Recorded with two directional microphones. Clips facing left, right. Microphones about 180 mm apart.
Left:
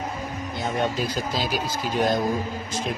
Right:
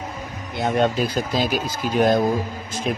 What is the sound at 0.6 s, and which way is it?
Speech, 65° right (ahead or behind).